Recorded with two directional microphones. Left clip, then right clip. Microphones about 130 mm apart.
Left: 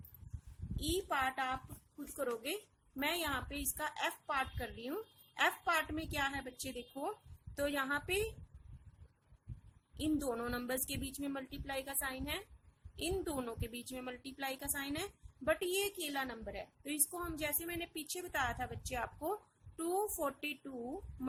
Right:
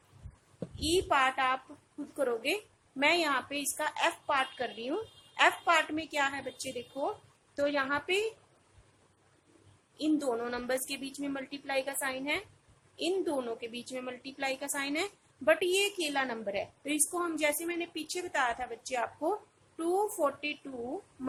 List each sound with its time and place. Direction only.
0.8 s a woman's voice: 35° left (ahead or behind)
10.0 s a woman's voice: 45° left (ahead or behind)